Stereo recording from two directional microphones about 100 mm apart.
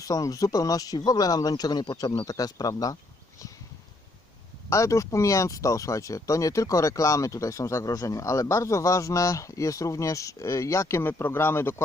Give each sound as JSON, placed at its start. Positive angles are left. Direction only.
{"t": 0.0, "sound": "speech", "side_deg": 35}
{"t": 4.7, "sound": "speech", "side_deg": 30}